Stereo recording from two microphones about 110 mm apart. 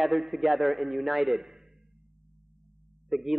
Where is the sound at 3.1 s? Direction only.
5° right (ahead or behind).